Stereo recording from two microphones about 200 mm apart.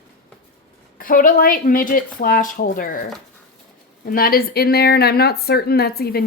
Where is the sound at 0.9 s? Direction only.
45° left (ahead or behind).